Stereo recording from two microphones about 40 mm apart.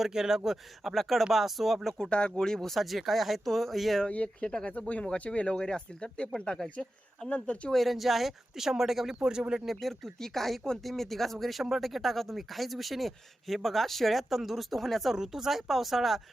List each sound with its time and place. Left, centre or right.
0.0 s speech: centre
2.0 s speech: left
2.6 s speech: centre
4.1 s speech: left
7.7 s speech: centre
9.3 s speech: right
9.8 s speech: centre
15.1 s speech: centre